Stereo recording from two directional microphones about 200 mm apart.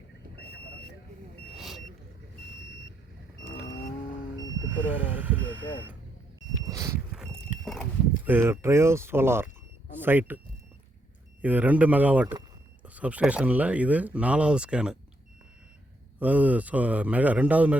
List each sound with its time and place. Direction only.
1.5 s vehicle: centre (ahead or behind)
4.7 s vehicle: 10° right (ahead or behind)
6.7 s a sound: 15° right (ahead or behind)
7.1 s livestock: 5° right (ahead or behind)
8.3 s speech: 15° right (ahead or behind)
11.4 s speech: 10° right (ahead or behind)
16.2 s speech: 5° right (ahead or behind)